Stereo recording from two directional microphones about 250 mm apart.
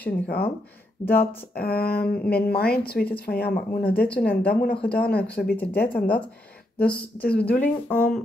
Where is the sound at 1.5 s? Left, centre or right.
Left.